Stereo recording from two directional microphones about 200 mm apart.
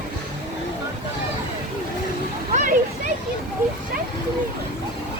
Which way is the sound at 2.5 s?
40° right (ahead or behind).